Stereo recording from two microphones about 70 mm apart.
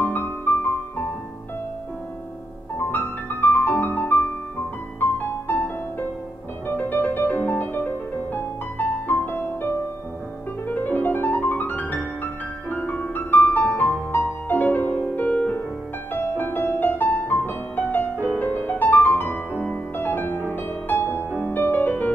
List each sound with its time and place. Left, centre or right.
0.0 s music: left
2.9 s music: left
6.7 s music: left
16.1 s music: left
21.2 s music: right
21.5 s music: left